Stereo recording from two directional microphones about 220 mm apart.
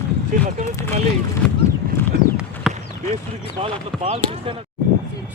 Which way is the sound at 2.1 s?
50° right (ahead or behind).